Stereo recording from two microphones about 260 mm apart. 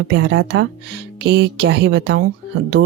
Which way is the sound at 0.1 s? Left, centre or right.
Right.